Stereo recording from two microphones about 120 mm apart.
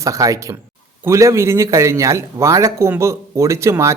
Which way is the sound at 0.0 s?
25° right (ahead or behind).